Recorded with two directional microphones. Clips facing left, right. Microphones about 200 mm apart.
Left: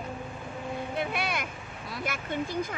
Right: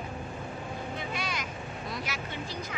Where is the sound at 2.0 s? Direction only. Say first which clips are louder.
Left 5 dB; 50° left (ahead or behind).